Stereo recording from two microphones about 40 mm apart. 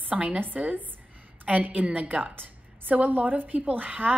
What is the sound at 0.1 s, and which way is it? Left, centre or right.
Speech, right.